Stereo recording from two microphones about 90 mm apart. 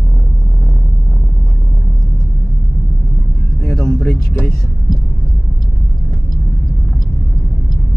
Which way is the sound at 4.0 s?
20° left (ahead or behind).